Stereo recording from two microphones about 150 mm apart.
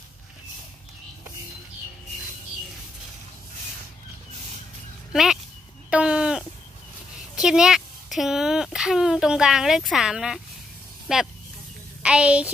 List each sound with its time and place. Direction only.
5.1 s a sound: centre (ahead or behind)
5.9 s sheep: 5° right (ahead or behind)
7.4 s a child's voice: 5° right (ahead or behind)